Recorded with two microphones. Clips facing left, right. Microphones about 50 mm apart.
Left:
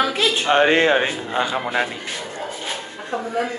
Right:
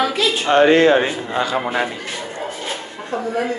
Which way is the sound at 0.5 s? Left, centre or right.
Left.